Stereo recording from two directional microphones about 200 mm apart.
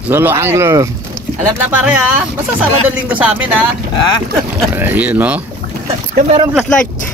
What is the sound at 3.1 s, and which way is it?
Speech, 5° right (ahead or behind).